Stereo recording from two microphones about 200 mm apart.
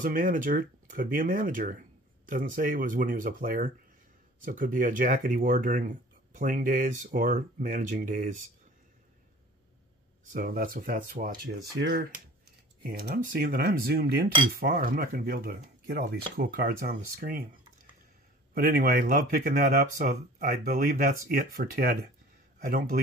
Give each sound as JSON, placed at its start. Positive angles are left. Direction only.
{"t": 0.0, "sound": "speech", "side_deg": -40}
{"t": 10.3, "sound": "speech", "side_deg": -45}
{"t": 18.5, "sound": "speech", "side_deg": -45}